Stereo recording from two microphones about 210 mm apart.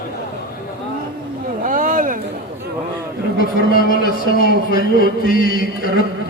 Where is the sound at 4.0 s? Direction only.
45° left (ahead or behind).